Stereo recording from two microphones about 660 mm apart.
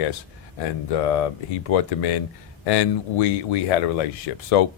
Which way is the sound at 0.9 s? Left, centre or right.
Left.